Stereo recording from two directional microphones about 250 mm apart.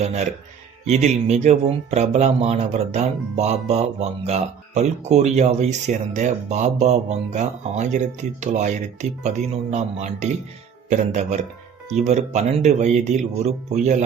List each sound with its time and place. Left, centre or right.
0.0 s speech: right